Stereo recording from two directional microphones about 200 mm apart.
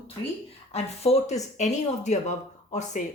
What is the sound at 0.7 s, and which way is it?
Speech, 30° left (ahead or behind).